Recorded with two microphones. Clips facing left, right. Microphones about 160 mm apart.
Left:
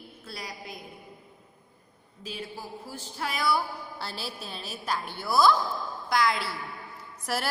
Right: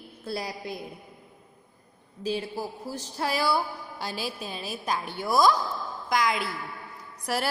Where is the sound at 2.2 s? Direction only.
40° right (ahead or behind).